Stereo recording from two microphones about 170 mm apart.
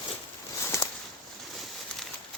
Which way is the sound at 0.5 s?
20° left (ahead or behind).